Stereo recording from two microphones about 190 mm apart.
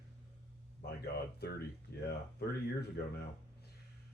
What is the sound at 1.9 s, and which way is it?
Speech, 55° left (ahead or behind).